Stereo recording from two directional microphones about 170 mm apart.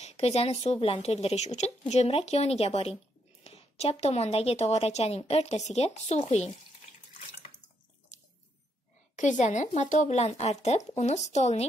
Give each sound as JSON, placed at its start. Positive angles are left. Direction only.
{"t": 0.0, "sound": "a woman's voice", "side_deg": 35}
{"t": 8.1, "sound": "drip", "side_deg": 45}
{"t": 9.1, "sound": "a woman's voice", "side_deg": 45}